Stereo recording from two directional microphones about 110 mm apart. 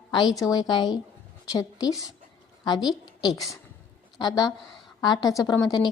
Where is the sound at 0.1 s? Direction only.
40° left (ahead or behind).